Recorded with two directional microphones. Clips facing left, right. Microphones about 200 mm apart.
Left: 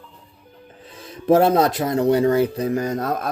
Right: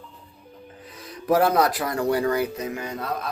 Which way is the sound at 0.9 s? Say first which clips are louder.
Left 6 dB; 25° left (ahead or behind).